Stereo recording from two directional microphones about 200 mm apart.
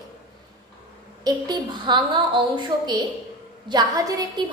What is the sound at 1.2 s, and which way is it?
A woman's voice, 20° right (ahead or behind).